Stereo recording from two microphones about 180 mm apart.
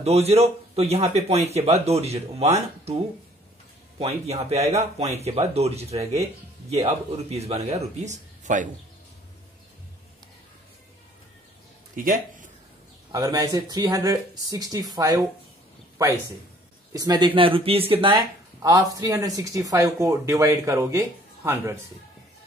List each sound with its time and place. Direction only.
0.0 s a man's voice: 35° right (ahead or behind)
4.0 s a man's voice: 35° right (ahead or behind)
11.9 s a man's voice: 50° right (ahead or behind)
13.1 s speech: 20° right (ahead or behind)
16.9 s speech: 20° right (ahead or behind)
18.6 s speech: 20° right (ahead or behind)